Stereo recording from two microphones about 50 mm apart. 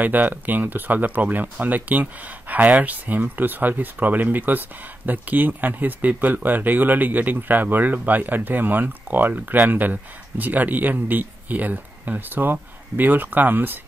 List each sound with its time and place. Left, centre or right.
0.0 s speech: right